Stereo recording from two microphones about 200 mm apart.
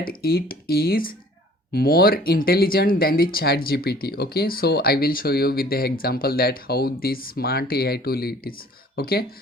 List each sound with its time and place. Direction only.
0.0 s speech: 45° left (ahead or behind)